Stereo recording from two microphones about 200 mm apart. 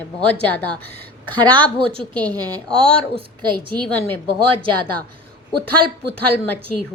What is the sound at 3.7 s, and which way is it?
Speech, 5° left (ahead or behind).